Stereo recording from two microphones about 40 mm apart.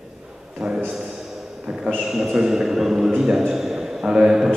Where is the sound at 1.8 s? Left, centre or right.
Centre.